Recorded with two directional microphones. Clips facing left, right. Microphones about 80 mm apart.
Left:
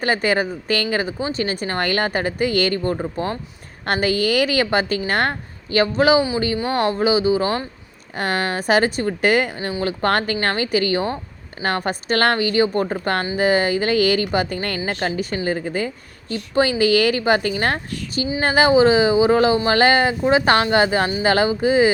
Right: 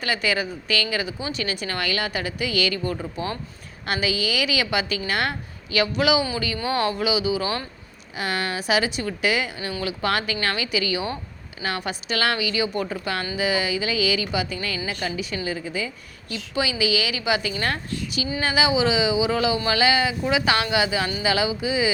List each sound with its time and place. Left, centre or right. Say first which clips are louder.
0.0 s speech: left 5 dB; left
8.1 s speech: left 5 dB; left